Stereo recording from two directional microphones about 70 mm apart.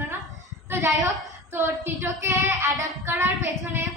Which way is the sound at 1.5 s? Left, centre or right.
Right.